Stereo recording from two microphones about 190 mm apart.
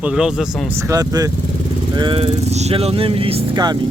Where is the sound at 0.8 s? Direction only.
15° right (ahead or behind).